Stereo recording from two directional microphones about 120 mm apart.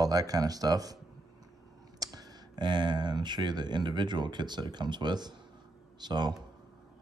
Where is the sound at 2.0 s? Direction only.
30° right (ahead or behind).